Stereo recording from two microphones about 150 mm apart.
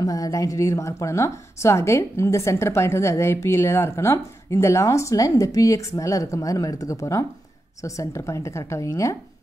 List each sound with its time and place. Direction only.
0.0 s speech: 25° left (ahead or behind)